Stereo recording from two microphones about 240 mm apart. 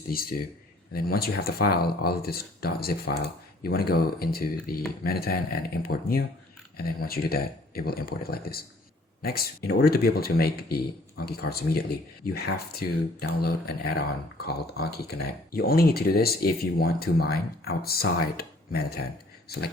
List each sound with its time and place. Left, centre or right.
0.1 s speech: left